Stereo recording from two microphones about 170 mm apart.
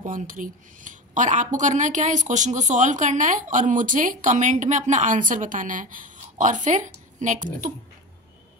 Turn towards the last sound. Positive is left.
turn(degrees=-45)  # may be behind; listen again after turning